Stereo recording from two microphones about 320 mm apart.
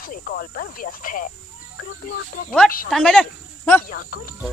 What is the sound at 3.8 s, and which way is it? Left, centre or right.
Speech, left.